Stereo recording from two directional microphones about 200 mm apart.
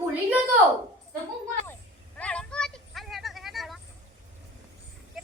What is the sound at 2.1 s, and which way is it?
Vehicle, 5° left (ahead or behind).